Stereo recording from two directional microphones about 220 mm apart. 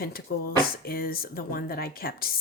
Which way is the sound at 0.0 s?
40° left (ahead or behind).